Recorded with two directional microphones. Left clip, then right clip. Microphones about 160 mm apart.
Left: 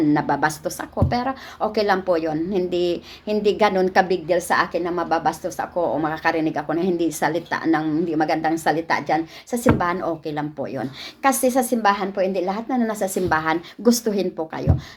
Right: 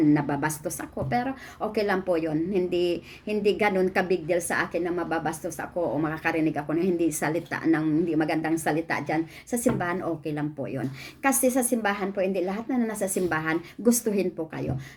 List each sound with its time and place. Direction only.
0.1 s speech: 20° right (ahead or behind)